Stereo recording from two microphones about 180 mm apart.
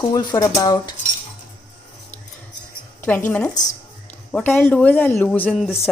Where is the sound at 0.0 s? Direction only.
20° left (ahead or behind).